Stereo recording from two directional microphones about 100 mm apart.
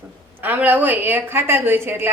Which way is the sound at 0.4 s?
20° right (ahead or behind).